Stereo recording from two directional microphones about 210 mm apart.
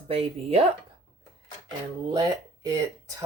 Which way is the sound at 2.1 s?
20° right (ahead or behind).